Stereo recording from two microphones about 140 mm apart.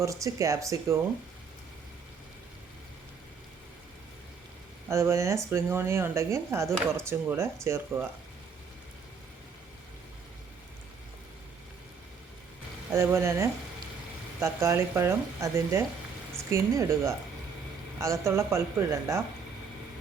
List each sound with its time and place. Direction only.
0.0 s speech: 20° right (ahead or behind)
4.9 s speech: 20° right (ahead or behind)
12.9 s speech: 20° right (ahead or behind)